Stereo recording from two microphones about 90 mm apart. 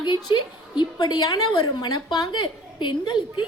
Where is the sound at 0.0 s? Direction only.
60° left (ahead or behind).